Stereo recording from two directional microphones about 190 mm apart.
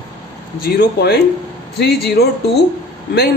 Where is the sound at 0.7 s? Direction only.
60° left (ahead or behind).